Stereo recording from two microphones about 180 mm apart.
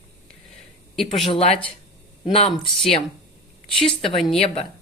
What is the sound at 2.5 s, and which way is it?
Speech, centre (ahead or behind).